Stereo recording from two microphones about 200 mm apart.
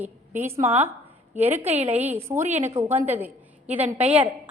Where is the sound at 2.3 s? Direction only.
35° right (ahead or behind).